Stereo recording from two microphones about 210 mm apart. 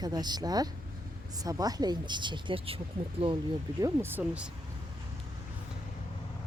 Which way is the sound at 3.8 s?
10° right (ahead or behind).